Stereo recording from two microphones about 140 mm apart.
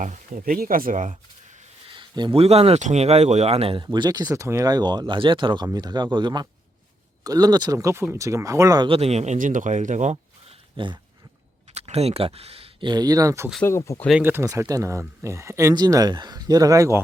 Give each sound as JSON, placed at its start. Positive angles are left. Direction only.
{"t": 0.0, "sound": "speech", "side_deg": -65}
{"t": 2.0, "sound": "speech", "side_deg": -35}
{"t": 3.9, "sound": "speech", "side_deg": -30}
{"t": 8.9, "sound": "speech", "side_deg": -45}
{"t": 10.8, "sound": "speech", "side_deg": -35}
{"t": 11.7, "sound": "speech", "side_deg": -45}
{"t": 13.7, "sound": "speech", "side_deg": 20}
{"t": 14.2, "sound": "speech", "side_deg": -15}